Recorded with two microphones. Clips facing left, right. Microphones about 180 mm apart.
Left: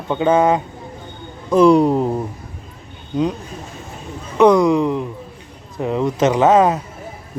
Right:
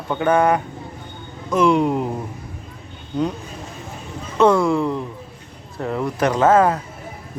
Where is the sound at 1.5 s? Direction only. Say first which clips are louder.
Left 5 dB; 35° left (ahead or behind).